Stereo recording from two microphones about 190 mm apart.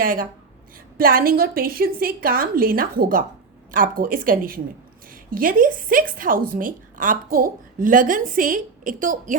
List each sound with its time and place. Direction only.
0.0 s a woman's voice: 45° right (ahead or behind)